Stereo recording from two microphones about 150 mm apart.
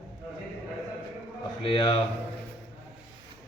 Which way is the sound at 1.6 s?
40° left (ahead or behind).